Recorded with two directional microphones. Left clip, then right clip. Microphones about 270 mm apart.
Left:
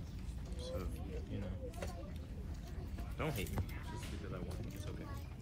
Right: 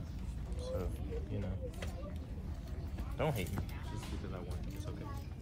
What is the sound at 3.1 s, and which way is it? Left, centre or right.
Speech, right.